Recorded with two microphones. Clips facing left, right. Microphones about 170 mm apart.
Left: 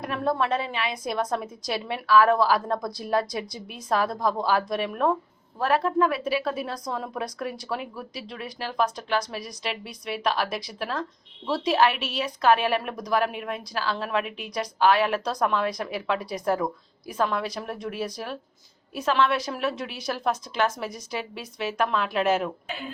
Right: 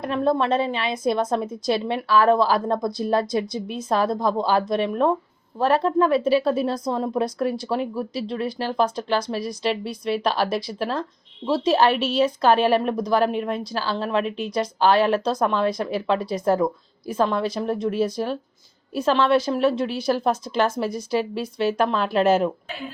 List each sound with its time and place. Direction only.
0.0 s a woman's voice: 25° right (ahead or behind)